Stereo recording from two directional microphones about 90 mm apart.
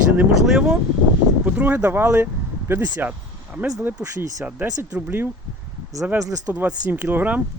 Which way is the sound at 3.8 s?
15° right (ahead or behind).